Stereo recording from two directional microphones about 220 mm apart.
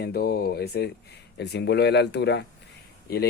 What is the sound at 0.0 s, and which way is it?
Speech, 45° left (ahead or behind).